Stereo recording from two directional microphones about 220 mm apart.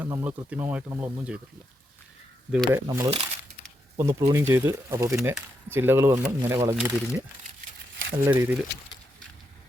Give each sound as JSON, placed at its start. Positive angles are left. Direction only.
{"t": 0.0, "sound": "speech", "side_deg": -10}
{"t": 2.5, "sound": "speech", "side_deg": -5}
{"t": 2.9, "sound": "speech", "side_deg": -20}